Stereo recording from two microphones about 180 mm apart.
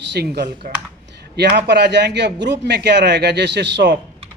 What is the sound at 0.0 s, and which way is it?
Speech, 70° right (ahead or behind).